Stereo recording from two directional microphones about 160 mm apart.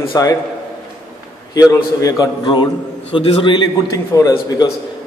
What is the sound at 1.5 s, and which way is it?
A man's voice, 20° left (ahead or behind).